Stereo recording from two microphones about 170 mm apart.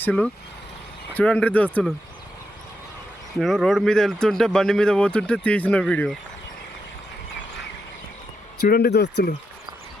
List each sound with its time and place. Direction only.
0.0 s speech: 5° left (ahead or behind)
3.3 s speech: centre (ahead or behind)
8.6 s speech: 65° left (ahead or behind)